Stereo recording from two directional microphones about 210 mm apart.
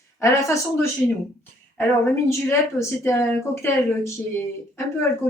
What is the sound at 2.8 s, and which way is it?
Speech, 15° left (ahead or behind).